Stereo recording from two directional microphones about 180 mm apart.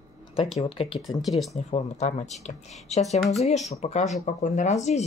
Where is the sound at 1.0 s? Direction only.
Centre (ahead or behind).